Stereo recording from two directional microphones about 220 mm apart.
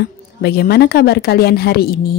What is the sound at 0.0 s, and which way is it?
A woman's voice, 45° left (ahead or behind).